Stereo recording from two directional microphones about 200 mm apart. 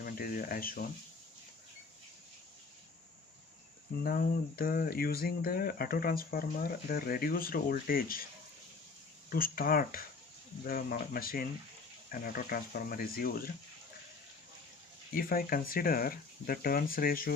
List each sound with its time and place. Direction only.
0.0 s speech: 45° left (ahead or behind)
4.0 s speech: 50° left (ahead or behind)
9.3 s speech: 45° left (ahead or behind)
15.1 s speech: 45° left (ahead or behind)